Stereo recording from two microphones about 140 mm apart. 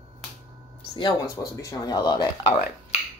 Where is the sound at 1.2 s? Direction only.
25° left (ahead or behind).